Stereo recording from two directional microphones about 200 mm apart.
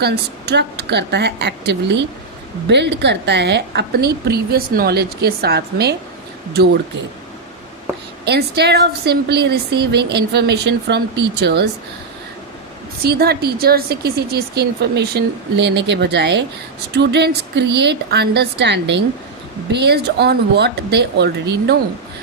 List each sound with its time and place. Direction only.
0.0 s a woman's voice: 55° right (ahead or behind)
8.2 s a woman's voice: 55° right (ahead or behind)
13.0 s a woman's voice: 50° right (ahead or behind)